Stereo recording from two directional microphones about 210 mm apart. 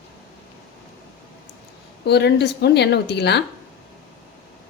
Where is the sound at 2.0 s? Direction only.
55° left (ahead or behind).